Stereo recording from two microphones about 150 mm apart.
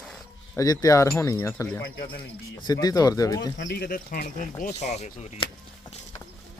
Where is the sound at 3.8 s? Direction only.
80° left; by 5.5 s 45° left (ahead or behind).